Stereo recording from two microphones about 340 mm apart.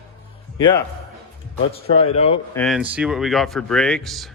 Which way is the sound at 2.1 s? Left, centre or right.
Centre.